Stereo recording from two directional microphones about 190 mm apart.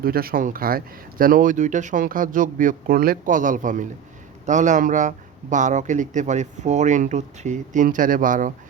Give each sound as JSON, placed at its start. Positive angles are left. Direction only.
{"t": 0.0, "sound": "speech", "side_deg": -50}